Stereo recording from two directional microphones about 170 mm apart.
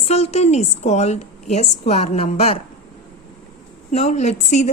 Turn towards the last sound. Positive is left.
turn(degrees=40)  # may be behind; listen again after turning